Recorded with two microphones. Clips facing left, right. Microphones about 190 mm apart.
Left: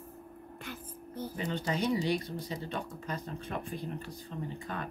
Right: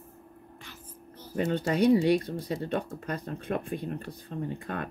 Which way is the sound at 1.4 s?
55° right (ahead or behind).